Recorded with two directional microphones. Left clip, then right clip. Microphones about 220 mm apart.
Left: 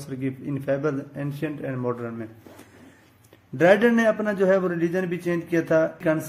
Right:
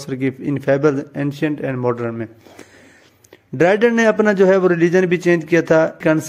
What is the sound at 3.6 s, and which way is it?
A man's voice, 40° right (ahead or behind).